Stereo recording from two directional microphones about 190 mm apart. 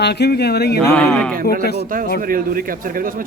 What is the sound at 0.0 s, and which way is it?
Speech, 60° left (ahead or behind).